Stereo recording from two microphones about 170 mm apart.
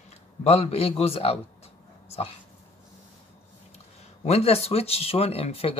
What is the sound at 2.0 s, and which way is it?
Dog, 35° left (ahead or behind).